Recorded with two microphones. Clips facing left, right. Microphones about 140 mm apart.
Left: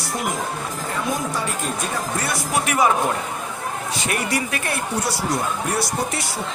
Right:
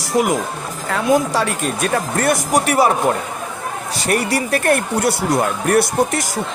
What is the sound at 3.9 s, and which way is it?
Speech, 35° right (ahead or behind).